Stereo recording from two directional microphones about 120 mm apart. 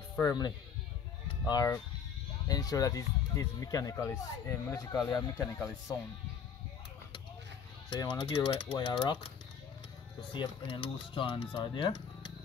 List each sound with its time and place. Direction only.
0.2 s speech: 30° left (ahead or behind)
8.0 s speech: 45° left (ahead or behind)
10.3 s speech: 45° left (ahead or behind)